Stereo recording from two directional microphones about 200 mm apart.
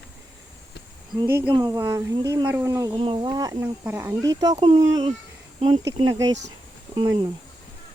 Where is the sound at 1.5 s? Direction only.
20° right (ahead or behind).